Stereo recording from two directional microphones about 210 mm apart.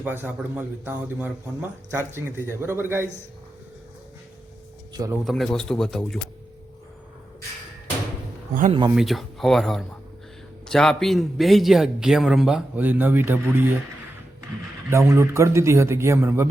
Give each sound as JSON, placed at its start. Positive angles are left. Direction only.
{"t": 0.0, "sound": "speech", "side_deg": -10}
{"t": 5.2, "sound": "a man's voice", "side_deg": 0}
{"t": 8.5, "sound": "speech", "side_deg": -35}
{"t": 9.0, "sound": "a man's voice", "side_deg": 0}
{"t": 14.8, "sound": "speech", "side_deg": -15}